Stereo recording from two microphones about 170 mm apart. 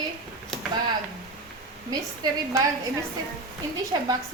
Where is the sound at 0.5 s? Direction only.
5° left (ahead or behind).